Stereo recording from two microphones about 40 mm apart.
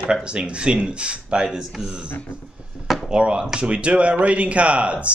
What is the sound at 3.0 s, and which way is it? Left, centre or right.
Speech, right.